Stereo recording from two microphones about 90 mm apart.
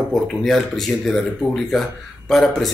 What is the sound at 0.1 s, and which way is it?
Speech, 5° left (ahead or behind).